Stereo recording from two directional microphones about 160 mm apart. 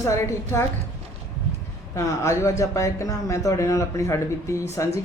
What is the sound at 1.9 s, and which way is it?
Speech, 20° left (ahead or behind).